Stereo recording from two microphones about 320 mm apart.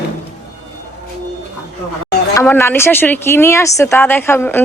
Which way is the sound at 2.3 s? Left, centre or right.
Centre.